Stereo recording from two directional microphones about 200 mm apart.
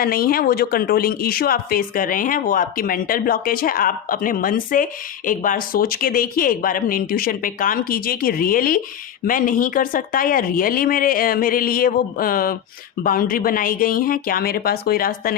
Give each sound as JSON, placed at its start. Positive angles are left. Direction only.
{"t": 0.0, "sound": "a woman's voice", "side_deg": 50}